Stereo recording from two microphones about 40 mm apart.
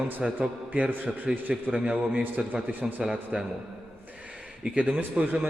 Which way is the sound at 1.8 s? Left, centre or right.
Right.